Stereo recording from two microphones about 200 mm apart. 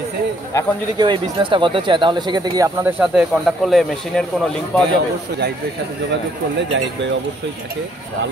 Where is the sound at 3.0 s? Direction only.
Centre (ahead or behind).